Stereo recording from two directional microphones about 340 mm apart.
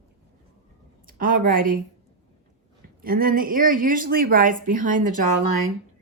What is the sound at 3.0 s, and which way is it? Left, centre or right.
Speech, right.